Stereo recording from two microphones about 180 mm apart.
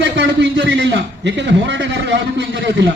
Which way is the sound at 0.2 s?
80° right.